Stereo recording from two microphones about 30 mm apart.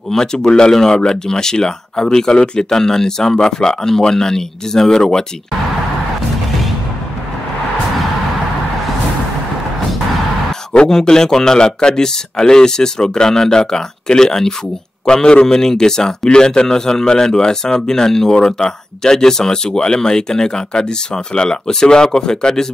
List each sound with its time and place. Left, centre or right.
0.1 s a man's voice: centre
2.7 s a man's voice: centre
10.9 s a man's voice: centre